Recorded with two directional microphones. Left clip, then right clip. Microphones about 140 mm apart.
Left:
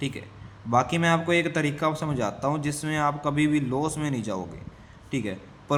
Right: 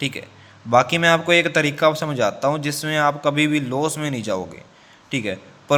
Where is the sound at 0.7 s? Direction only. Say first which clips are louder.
Right 7 dB; 15° right (ahead or behind).